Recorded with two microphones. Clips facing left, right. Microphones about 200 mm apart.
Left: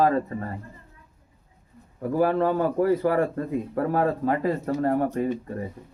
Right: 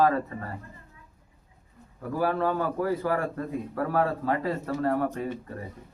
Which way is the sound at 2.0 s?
25° left (ahead or behind).